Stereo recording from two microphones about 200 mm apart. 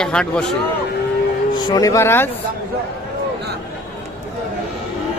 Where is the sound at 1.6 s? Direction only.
20° left (ahead or behind).